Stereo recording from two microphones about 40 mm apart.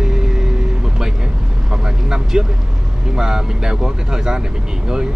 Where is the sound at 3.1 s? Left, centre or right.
Centre.